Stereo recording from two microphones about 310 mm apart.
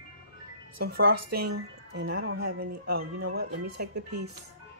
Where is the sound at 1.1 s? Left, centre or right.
Right.